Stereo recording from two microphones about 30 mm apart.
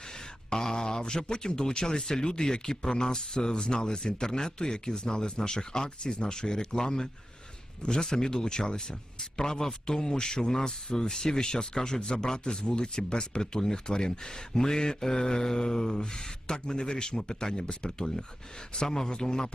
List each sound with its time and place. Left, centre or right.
0.1 s speech: left